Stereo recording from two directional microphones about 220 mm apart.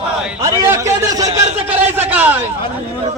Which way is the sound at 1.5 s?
10° right (ahead or behind).